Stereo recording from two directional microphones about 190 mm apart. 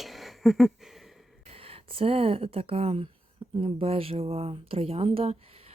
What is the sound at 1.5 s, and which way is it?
Speech, 30° right (ahead or behind).